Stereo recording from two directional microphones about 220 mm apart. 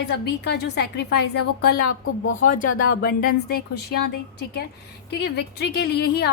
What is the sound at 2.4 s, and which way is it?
Speech, 40° left (ahead or behind).